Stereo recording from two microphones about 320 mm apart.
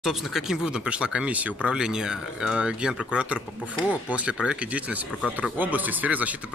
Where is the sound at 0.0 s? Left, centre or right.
Centre.